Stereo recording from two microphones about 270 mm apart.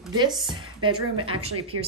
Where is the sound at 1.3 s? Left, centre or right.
Right.